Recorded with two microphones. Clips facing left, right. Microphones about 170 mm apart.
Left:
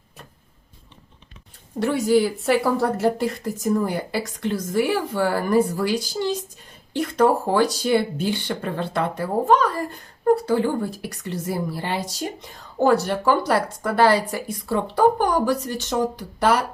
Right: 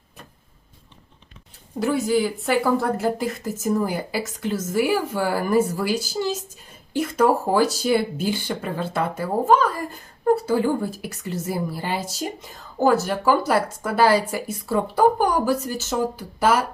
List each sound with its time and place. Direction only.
1.8 s speech: centre (ahead or behind)